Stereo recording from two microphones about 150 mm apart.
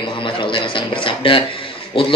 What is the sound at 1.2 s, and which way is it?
Speech, 35° left (ahead or behind).